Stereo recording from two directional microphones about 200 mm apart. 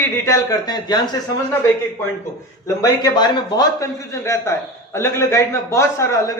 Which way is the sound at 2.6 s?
20° left (ahead or behind).